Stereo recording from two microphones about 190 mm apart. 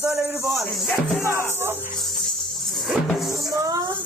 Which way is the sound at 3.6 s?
20° right (ahead or behind).